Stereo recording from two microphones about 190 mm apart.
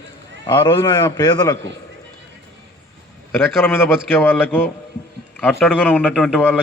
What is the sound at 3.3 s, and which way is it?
A man's voice, 10° left (ahead or behind).